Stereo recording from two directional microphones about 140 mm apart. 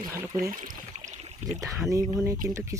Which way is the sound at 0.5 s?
70° right (ahead or behind).